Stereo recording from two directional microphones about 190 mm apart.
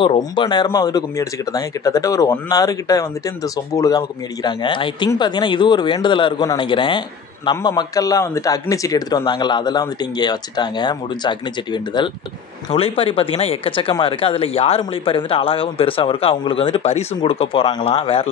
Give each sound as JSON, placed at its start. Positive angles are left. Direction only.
{"t": 0.0, "sound": "a man's voice", "side_deg": 25}